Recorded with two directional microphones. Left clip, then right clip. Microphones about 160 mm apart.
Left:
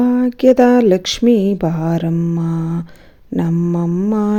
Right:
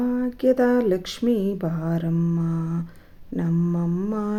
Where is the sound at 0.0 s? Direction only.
50° left (ahead or behind).